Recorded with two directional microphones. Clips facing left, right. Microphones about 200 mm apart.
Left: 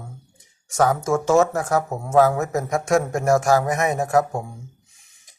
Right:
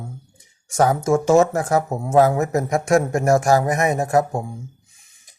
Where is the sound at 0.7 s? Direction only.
15° right (ahead or behind).